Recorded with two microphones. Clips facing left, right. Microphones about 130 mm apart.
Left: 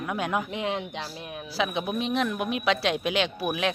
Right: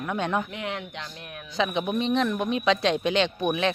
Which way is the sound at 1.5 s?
5° left (ahead or behind).